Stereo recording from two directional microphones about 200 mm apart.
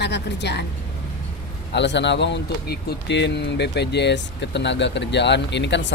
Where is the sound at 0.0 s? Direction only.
60° left (ahead or behind).